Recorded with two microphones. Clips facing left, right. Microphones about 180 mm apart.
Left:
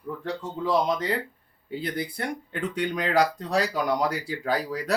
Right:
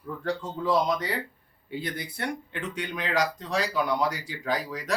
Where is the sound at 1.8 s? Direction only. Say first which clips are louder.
Left 3 dB; 30° left (ahead or behind).